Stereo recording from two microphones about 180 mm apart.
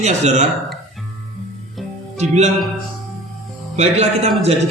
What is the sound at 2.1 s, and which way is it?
Speech, 40° right (ahead or behind).